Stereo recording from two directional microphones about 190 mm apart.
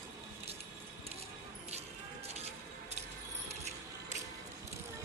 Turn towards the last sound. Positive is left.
turn(degrees=-35)  # may be behind; listen again after turning